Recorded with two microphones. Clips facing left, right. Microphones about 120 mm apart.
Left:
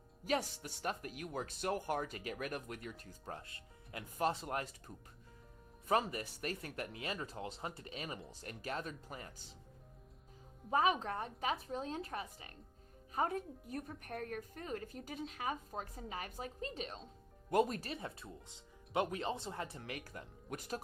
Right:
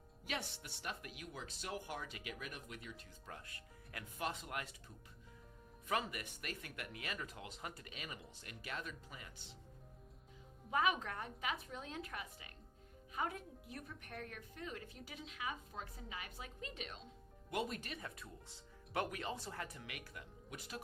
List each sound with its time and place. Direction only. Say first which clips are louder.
0.3 s a woman's voice: left 8 dB; 40° left (ahead or behind)
4.2 s speech: left 7 dB; 35° left (ahead or behind)
10.7 s a woman's voice: left 4 dB; 30° left (ahead or behind)
19.8 s speech: left 5 dB; 35° left (ahead or behind)